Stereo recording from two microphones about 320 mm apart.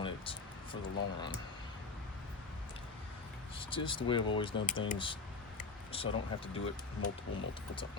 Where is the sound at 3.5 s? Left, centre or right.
Centre.